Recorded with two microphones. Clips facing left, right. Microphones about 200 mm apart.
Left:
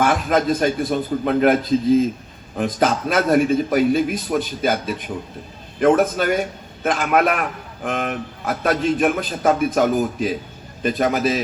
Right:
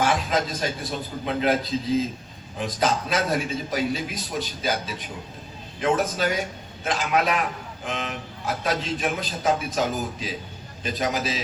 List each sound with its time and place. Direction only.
0.0 s a man's voice: 55° left (ahead or behind)